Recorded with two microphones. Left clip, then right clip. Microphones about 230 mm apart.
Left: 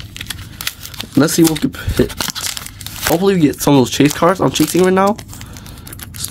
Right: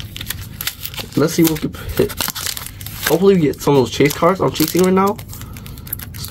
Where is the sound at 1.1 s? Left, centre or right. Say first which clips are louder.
Left 3 dB; left.